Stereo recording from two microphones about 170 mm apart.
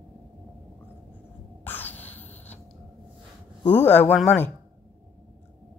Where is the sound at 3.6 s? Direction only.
10° left (ahead or behind).